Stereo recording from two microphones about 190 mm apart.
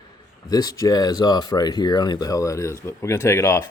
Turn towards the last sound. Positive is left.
turn(degrees=15)  # may be behind; listen again after turning